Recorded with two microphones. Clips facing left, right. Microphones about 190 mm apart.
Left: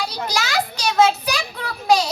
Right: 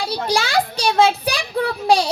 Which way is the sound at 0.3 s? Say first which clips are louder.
Right 5 dB; 30° right (ahead or behind).